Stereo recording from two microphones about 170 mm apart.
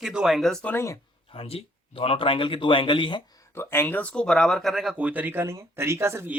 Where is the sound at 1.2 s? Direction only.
35° left (ahead or behind); by 6.4 s 15° right (ahead or behind).